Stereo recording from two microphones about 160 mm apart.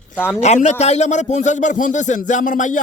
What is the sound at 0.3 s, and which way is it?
A man's voice, 45° left (ahead or behind).